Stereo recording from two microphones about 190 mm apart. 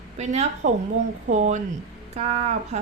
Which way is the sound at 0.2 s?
35° right (ahead or behind).